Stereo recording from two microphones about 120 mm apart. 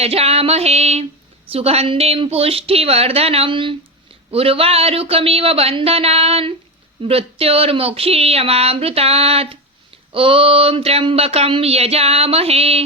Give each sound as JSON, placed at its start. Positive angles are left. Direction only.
{"t": 0.0, "sound": "speech", "side_deg": -55}